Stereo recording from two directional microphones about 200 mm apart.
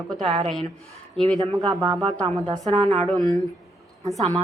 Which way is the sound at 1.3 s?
20° right (ahead or behind).